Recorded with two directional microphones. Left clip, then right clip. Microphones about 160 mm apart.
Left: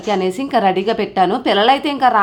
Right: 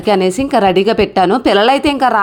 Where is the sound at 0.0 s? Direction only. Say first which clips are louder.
Right 5 dB; 35° right (ahead or behind).